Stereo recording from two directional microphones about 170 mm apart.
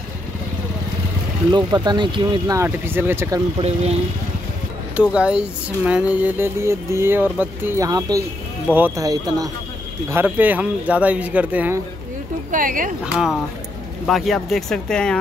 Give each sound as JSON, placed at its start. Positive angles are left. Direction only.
{"t": 1.5, "sound": "speech", "side_deg": -25}
{"t": 4.9, "sound": "speech", "side_deg": -5}
{"t": 9.0, "sound": "speech", "side_deg": -20}
{"t": 12.4, "sound": "speech", "side_deg": -55}
{"t": 13.0, "sound": "speech", "side_deg": -5}